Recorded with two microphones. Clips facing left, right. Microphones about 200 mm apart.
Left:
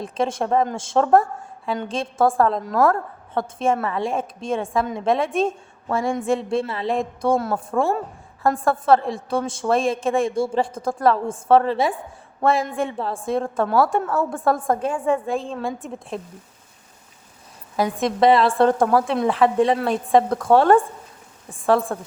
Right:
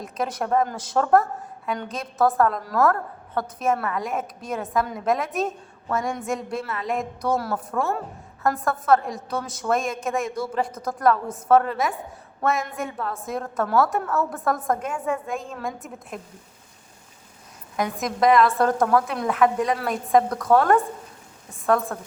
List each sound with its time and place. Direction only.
0.0 s a woman's voice: 30° left (ahead or behind)
17.7 s a woman's voice: 30° left (ahead or behind)